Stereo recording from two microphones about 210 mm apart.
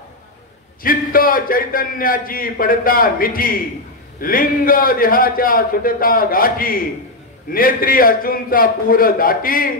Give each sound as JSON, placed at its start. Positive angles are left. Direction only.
{"t": 0.8, "sound": "a man's voice", "side_deg": 45}